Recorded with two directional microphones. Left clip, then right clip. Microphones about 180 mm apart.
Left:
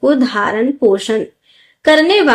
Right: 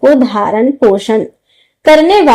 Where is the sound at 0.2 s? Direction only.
20° right (ahead or behind).